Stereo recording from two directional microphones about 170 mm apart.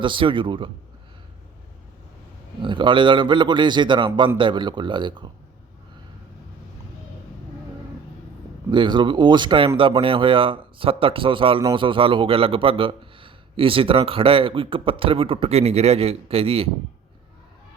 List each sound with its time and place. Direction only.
0.0 s a man's voice: 30° right (ahead or behind)
2.6 s a man's voice: 30° right (ahead or behind)
8.7 s a man's voice: 30° right (ahead or behind)